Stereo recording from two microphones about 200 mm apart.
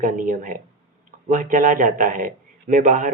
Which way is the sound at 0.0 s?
45° right (ahead or behind).